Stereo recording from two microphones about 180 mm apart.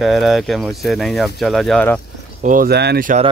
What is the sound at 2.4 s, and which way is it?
Speech, 55° right (ahead or behind).